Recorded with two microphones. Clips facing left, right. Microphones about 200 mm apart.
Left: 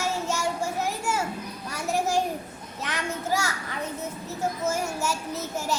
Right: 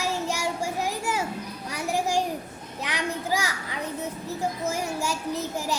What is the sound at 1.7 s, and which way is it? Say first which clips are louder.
A child's voice: even; 15° right (ahead or behind).